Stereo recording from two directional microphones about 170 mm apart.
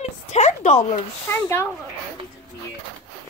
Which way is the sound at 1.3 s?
15° left (ahead or behind).